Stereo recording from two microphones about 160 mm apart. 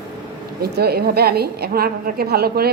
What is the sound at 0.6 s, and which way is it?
A man's voice, 80° right.